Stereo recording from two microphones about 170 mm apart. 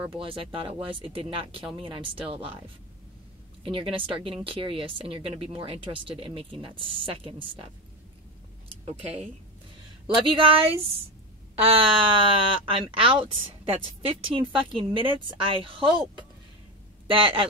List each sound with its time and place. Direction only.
0.1 s speech: 30° right (ahead or behind)
3.6 s speech: 30° right (ahead or behind)
10.1 s speech: 30° right (ahead or behind)
17.1 s speech: 30° right (ahead or behind)